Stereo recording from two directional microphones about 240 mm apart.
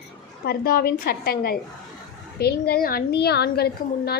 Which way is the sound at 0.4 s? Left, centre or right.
Left.